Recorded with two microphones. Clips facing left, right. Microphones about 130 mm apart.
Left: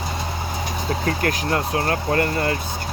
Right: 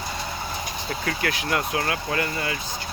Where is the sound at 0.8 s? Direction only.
40° left (ahead or behind).